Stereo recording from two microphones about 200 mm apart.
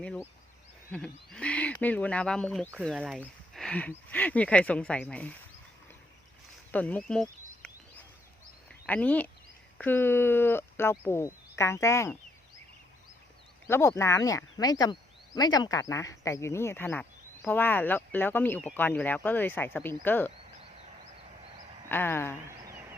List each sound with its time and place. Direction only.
0.0 s speech: 5° left (ahead or behind)
6.7 s speech: 5° left (ahead or behind)
8.9 s speech: 5° left (ahead or behind)
13.7 s speech: 15° left (ahead or behind)
21.8 s speech: 10° left (ahead or behind)
22.4 s a sound: 15° right (ahead or behind)